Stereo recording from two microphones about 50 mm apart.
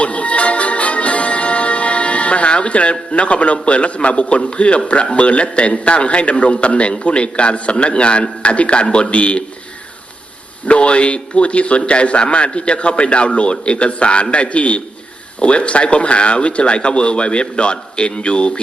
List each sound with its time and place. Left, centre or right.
0.0 s music: left
5.1 s a man's voice: left
10.7 s a man's voice: left